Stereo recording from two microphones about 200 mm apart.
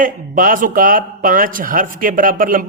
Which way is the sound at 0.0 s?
45° right (ahead or behind).